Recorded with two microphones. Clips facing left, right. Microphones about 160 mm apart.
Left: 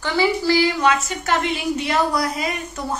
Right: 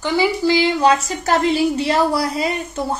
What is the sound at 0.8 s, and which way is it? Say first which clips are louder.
A woman's voice: right 4 dB; 35° right (ahead or behind).